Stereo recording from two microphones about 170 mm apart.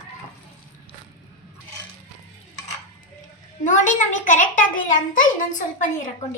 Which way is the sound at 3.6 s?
50° left (ahead or behind).